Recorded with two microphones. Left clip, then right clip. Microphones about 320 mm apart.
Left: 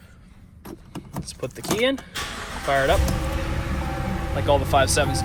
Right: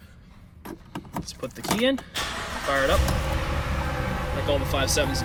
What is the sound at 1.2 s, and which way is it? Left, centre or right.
Speech, centre.